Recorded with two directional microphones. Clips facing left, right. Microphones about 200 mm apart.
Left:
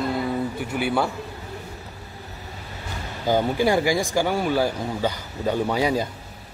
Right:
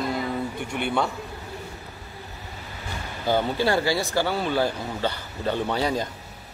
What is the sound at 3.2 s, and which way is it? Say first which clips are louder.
Speech: left 2 dB; 15° left (ahead or behind).